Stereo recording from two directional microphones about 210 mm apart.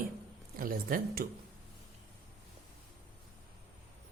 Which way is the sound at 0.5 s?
45° right (ahead or behind).